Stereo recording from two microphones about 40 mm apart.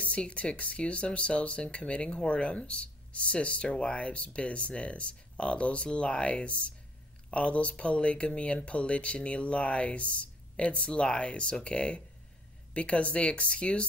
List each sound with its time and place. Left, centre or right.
0.0 s speech: left